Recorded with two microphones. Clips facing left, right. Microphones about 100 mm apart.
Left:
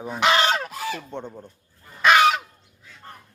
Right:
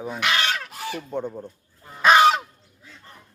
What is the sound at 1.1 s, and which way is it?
Speech, 5° right (ahead or behind).